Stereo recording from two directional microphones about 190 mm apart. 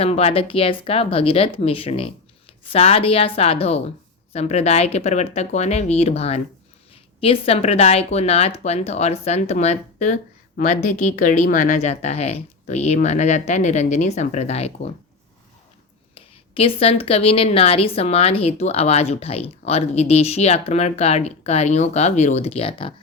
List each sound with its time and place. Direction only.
0.0 s a woman's voice: 30° left (ahead or behind)
16.1 s a woman's voice: 30° left (ahead or behind)